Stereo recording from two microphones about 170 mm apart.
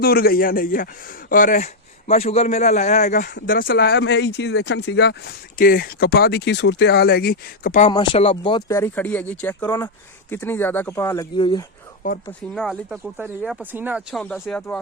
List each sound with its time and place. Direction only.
0.0 s a man's voice: 60° left (ahead or behind); by 3.2 s 45° left (ahead or behind)
3.4 s speech: 55° left (ahead or behind)
7.9 s speech: 35° left (ahead or behind)
12.0 s speech: 50° left (ahead or behind)
12.5 s speech: centre (ahead or behind)
14.2 s speech: 5° left (ahead or behind)